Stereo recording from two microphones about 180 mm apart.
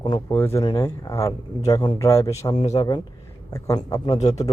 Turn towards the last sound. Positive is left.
turn(degrees=20)  # may be behind; listen again after turning